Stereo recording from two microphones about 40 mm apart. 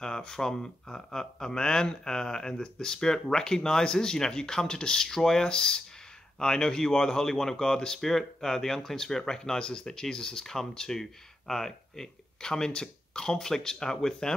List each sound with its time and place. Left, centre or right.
0.0 s speech: centre